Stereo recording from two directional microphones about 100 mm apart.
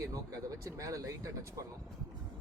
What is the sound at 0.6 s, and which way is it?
Speech, 35° right (ahead or behind).